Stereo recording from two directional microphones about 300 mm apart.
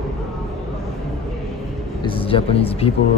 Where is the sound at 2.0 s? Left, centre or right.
Centre.